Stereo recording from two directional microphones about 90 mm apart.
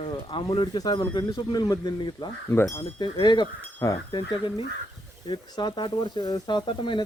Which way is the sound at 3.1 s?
60° left (ahead or behind).